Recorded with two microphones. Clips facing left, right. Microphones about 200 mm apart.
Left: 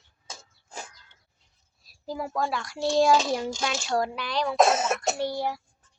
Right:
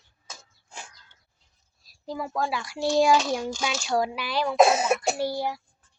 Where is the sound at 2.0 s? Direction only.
5° left (ahead or behind).